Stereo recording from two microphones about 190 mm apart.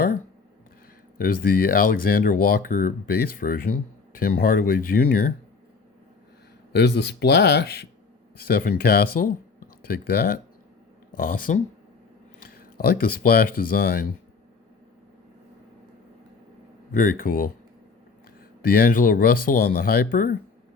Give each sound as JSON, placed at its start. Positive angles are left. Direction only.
{"t": 1.2, "sound": "speech", "side_deg": 50}
{"t": 6.7, "sound": "speech", "side_deg": 60}
{"t": 16.9, "sound": "speech", "side_deg": 45}
{"t": 18.6, "sound": "speech", "side_deg": 50}